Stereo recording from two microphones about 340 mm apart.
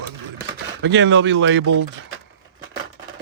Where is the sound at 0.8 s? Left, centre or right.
Right.